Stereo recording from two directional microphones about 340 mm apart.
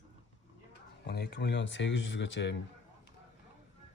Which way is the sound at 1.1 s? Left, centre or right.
Left.